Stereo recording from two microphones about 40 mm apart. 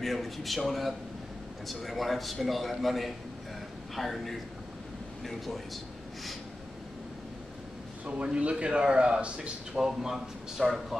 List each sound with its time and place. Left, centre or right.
0.0 s a man's voice: centre
8.0 s a man's voice: right
9.8 s a man's voice: centre